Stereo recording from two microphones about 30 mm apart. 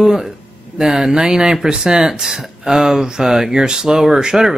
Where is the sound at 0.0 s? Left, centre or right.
Centre.